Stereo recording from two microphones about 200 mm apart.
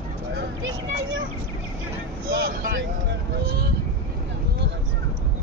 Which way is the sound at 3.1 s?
50° right (ahead or behind).